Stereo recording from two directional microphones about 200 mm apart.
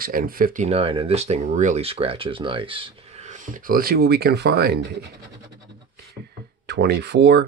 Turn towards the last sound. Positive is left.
turn(degrees=-55)  # may be behind; listen again after turning